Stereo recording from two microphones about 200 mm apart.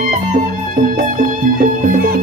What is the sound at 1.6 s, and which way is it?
Music, 40° right (ahead or behind).